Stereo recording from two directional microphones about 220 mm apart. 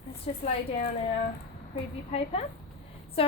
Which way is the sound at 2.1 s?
25° left (ahead or behind).